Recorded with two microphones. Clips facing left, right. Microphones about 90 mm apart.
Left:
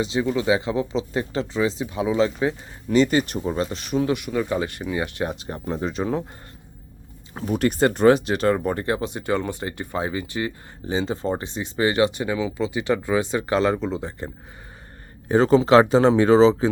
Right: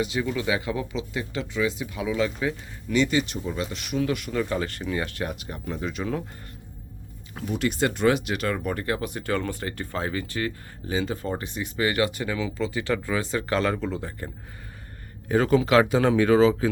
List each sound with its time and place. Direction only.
0.0 s speech: 25° left (ahead or behind)
1.1 s speech: 35° left (ahead or behind)
7.3 s speech: 45° left (ahead or behind); by 14.3 s 20° left (ahead or behind)
15.3 s speech: 30° left (ahead or behind)